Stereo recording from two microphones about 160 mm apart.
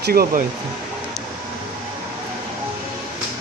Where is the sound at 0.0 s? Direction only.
70° right (ahead or behind).